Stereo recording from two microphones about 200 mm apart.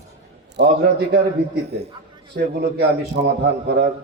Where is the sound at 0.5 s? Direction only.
55° right (ahead or behind).